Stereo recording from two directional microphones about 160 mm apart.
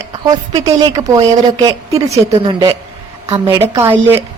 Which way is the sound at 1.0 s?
25° right (ahead or behind).